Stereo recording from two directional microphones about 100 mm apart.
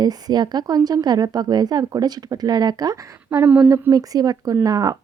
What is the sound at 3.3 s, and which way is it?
Speech, 20° right (ahead or behind).